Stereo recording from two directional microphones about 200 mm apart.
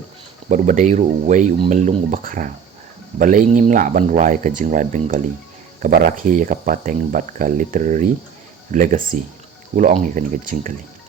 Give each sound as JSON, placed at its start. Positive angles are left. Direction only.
{"t": 0.4, "sound": "speech", "side_deg": -35}